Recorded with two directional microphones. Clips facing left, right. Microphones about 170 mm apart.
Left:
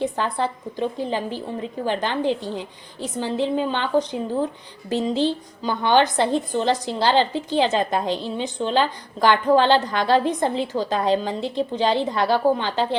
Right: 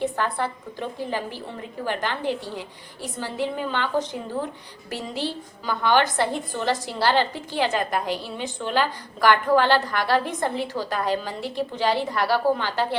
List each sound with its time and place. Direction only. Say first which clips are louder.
0.0 s a woman's voice: left 2 dB; 20° left (ahead or behind)